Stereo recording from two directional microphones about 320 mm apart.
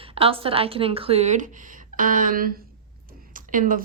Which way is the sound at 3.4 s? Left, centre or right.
Right.